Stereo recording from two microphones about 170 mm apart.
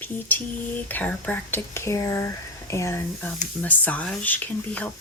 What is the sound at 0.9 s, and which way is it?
Speech, 10° left (ahead or behind).